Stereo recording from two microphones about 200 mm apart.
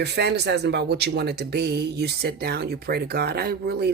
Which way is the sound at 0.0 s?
55° right (ahead or behind).